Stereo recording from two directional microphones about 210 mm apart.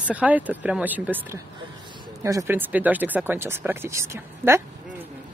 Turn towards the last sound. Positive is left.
turn(degrees=-10)  # may be behind; listen again after turning